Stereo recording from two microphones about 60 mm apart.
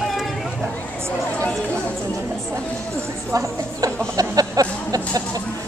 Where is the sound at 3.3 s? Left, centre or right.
Right.